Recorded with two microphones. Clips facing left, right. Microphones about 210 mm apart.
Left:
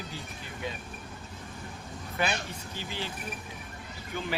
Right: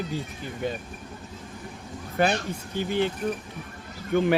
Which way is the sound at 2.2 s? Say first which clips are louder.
Right 8 dB; 45° right (ahead or behind).